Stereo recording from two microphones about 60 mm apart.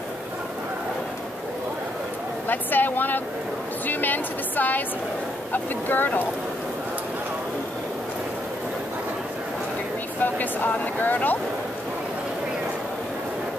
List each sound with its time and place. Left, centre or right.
2.4 s speech: left
10.2 s speech: left